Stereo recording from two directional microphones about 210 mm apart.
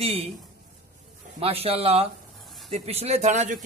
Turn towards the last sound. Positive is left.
turn(degrees=-35)  # may be behind; listen again after turning